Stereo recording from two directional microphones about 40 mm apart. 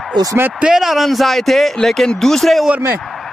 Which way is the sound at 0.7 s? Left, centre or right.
Centre.